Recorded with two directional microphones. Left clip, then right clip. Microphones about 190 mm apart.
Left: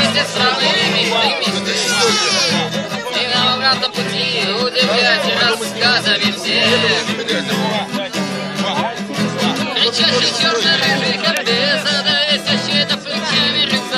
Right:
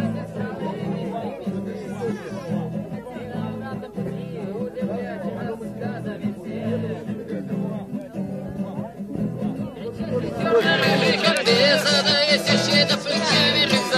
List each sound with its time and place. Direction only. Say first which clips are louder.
10.7 s music: left 4 dB; 10° right (ahead or behind); by 13.7 s 30° right (ahead or behind)